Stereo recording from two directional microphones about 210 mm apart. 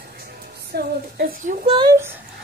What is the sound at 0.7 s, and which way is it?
Speech, 50° right (ahead or behind).